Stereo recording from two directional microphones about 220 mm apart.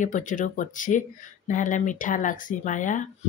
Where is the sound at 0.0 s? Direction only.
35° left (ahead or behind).